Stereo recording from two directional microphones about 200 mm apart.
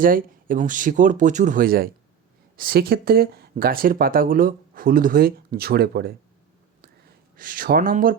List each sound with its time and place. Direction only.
0.0 s speech: 45° right (ahead or behind)
7.3 s speech: 45° right (ahead or behind)